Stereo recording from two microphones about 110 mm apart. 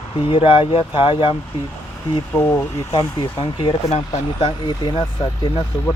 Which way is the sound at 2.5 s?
35° left (ahead or behind).